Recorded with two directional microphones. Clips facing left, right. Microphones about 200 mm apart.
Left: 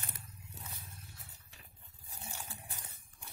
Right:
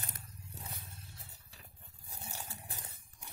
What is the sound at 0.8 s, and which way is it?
Roaring cats, 30° right (ahead or behind).